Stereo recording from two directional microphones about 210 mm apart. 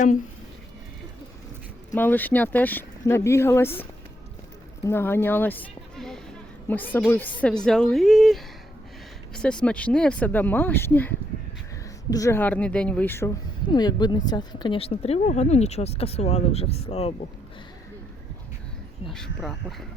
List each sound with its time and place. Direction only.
1.9 s a woman's voice: 10° left (ahead or behind)
12.1 s a woman's voice: 15° left (ahead or behind); by 17.2 s 30° left (ahead or behind)
19.0 s speech: centre (ahead or behind)